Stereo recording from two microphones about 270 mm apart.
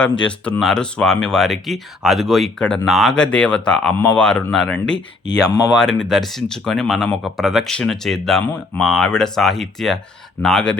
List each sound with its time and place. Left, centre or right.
0.0 s speech: centre